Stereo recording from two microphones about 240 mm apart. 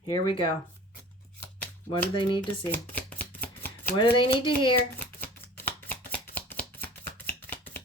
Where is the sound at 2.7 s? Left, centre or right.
Centre.